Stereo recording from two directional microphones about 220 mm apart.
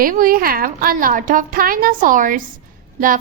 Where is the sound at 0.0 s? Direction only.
40° right (ahead or behind).